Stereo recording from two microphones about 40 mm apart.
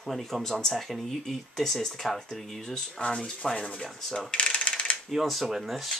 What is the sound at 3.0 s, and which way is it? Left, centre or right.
Rub, left.